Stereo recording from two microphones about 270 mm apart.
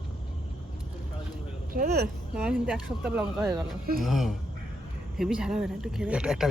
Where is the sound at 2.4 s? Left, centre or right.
Centre.